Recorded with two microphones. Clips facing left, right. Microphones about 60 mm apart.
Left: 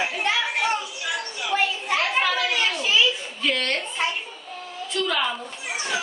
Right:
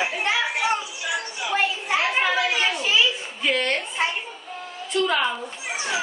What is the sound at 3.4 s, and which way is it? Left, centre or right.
Speech, centre.